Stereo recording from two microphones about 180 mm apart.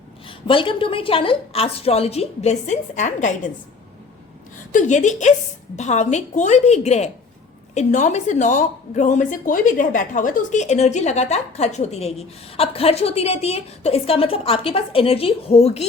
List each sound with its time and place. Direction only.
0.3 s a woman's voice: 30° left (ahead or behind)
4.7 s a woman's voice: 45° left (ahead or behind)